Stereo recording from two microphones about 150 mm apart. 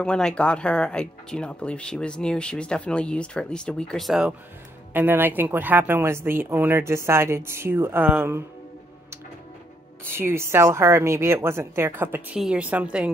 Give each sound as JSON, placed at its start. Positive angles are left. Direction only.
{"t": 0.0, "sound": "speech", "side_deg": 5}
{"t": 4.9, "sound": "speech", "side_deg": -15}
{"t": 10.0, "sound": "speech", "side_deg": -15}